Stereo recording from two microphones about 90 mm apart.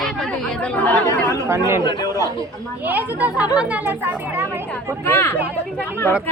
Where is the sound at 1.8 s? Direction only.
55° left (ahead or behind).